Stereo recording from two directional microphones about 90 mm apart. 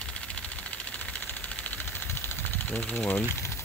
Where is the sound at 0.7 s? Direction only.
15° left (ahead or behind).